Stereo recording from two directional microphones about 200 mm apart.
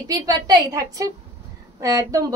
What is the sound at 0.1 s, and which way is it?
A woman's voice, 20° right (ahead or behind).